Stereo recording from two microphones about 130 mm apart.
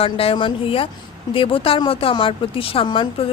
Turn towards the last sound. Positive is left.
turn(degrees=35)  # may be behind; listen again after turning